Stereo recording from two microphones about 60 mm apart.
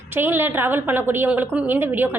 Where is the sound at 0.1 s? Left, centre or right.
Right.